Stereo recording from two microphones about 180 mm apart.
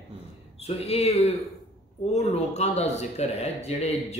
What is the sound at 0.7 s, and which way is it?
A man's voice, 35° left (ahead or behind).